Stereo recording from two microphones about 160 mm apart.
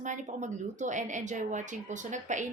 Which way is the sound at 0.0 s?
50° right (ahead or behind).